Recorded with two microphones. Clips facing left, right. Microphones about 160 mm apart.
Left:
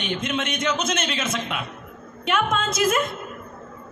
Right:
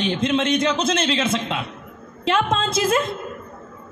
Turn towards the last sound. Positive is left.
turn(degrees=-30)  # may be behind; listen again after turning